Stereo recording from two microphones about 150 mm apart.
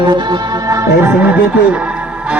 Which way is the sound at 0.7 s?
15° right (ahead or behind).